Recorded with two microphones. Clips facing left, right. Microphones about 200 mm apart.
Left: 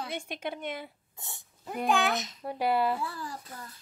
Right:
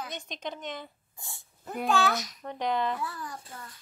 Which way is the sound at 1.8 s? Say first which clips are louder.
Right 1 dB; 20° left (ahead or behind).